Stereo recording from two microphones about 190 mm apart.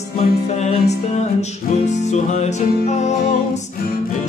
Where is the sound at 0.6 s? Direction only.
35° left (ahead or behind).